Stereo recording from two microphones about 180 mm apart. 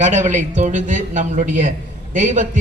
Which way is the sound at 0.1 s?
40° right (ahead or behind).